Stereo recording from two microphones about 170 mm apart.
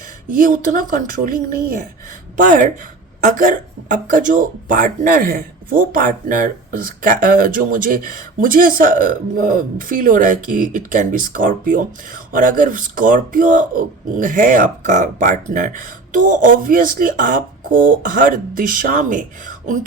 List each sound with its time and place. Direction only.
0.3 s speech: 50° right (ahead or behind)